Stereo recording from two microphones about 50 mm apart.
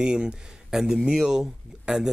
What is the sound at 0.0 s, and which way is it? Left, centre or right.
Speech, centre.